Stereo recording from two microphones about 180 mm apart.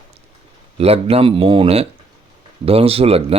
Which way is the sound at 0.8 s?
35° right (ahead or behind).